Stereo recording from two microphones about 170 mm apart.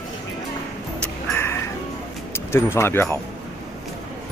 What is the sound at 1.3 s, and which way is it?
Music, 15° left (ahead or behind).